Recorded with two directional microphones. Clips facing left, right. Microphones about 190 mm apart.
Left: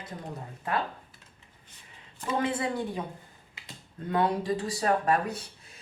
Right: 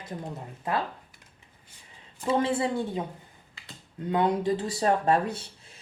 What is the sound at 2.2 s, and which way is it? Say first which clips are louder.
Speech: right 4 dB; 30° right (ahead or behind).